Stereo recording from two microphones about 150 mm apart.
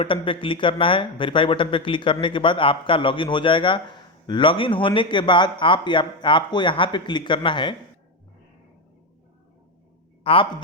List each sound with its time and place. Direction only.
0.0 s a man's voice: 35° left (ahead or behind)
10.3 s a man's voice: 35° left (ahead or behind)